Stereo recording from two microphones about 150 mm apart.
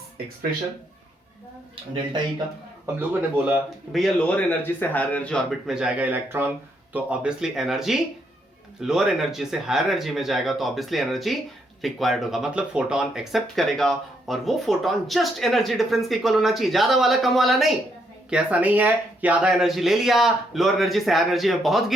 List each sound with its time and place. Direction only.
1.7 s speech: 30° right (ahead or behind)
3.3 s speech: 10° right (ahead or behind)
3.9 s speech: centre (ahead or behind)
4.6 s speech: 10° left (ahead or behind)